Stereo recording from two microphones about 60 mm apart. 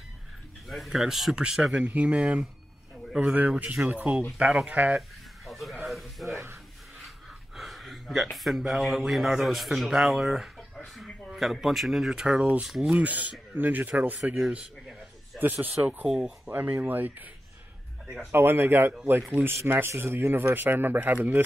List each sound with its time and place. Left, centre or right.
0.7 s speech: centre
1.3 s speech: centre
4.9 s sheep: centre
5.9 s a sound: centre
6.3 s speech: right
7.5 s speech: centre
11.1 s a sound: centre
11.6 s speech: centre; by 16.1 s right
16.1 s speech: centre
16.4 s speech: right
18.3 s speech: right